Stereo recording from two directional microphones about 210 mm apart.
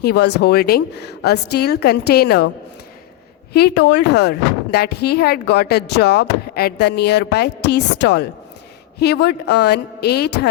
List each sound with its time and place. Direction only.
0.0 s speech: 50° left (ahead or behind)
3.5 s speech: 50° left (ahead or behind)